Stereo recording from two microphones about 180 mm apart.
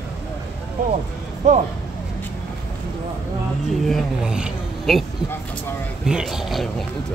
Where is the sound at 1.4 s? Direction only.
40° right (ahead or behind).